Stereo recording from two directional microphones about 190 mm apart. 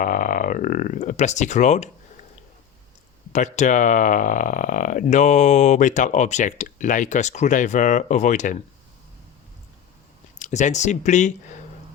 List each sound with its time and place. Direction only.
0.0 s speech: 45° left (ahead or behind)
3.3 s speech: 40° left (ahead or behind)
10.3 s speech: 40° left (ahead or behind)